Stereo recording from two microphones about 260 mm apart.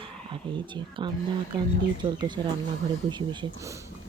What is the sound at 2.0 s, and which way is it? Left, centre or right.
Speech, right.